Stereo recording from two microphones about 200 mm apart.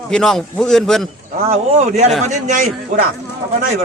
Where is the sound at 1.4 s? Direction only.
35° right (ahead or behind).